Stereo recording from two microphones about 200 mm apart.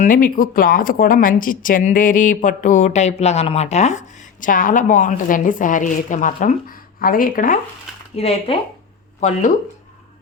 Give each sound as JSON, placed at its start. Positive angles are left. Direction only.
{"t": 0.0, "sound": "speech", "side_deg": 45}
{"t": 8.1, "sound": "speech", "side_deg": 30}